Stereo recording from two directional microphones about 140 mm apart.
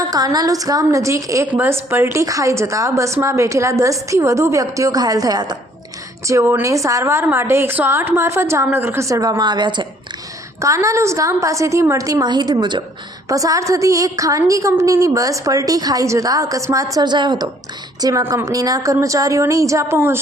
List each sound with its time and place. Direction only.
0.1 s a woman's voice: 25° right (ahead or behind)
10.6 s a woman's voice: 20° right (ahead or behind)